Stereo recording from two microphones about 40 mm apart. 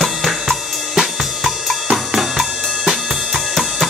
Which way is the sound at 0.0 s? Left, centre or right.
Centre.